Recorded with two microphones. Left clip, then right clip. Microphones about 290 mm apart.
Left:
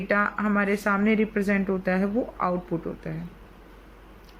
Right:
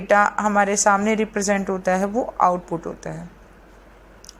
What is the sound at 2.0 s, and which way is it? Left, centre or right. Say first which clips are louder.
Speech: right 8 dB; right.